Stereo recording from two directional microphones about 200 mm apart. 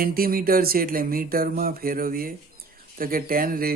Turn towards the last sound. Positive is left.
turn(degrees=-45)  # may be behind; listen again after turning